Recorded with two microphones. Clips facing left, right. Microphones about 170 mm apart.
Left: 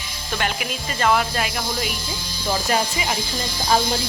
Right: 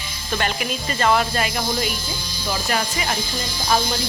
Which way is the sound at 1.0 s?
5° left (ahead or behind).